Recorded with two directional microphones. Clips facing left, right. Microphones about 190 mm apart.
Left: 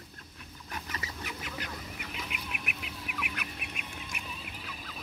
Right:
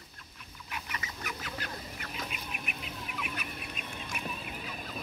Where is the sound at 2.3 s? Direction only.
70° left (ahead or behind).